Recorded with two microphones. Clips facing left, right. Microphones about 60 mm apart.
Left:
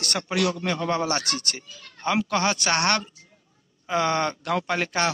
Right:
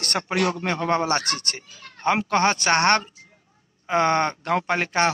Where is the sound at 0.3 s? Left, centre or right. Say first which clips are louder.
Right 1 dB; right.